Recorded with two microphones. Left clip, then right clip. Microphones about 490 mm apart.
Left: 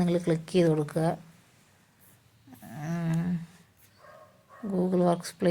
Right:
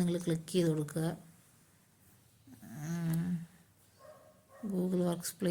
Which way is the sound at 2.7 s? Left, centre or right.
Right.